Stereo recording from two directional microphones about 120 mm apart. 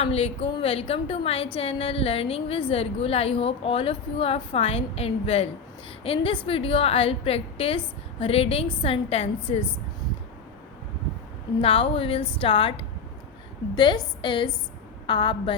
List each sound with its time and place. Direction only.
0.0 s a woman's voice: 50° left (ahead or behind)
11.6 s a woman's voice: 45° left (ahead or behind)